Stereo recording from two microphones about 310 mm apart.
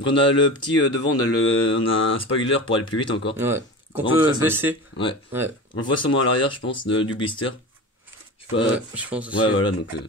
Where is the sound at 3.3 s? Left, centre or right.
Centre.